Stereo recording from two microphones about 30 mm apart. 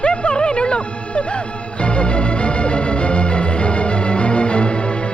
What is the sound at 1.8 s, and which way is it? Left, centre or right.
Music, left.